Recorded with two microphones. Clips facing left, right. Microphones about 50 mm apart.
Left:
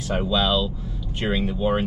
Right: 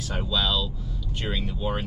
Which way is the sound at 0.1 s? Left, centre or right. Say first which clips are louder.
Left 5 dB; left.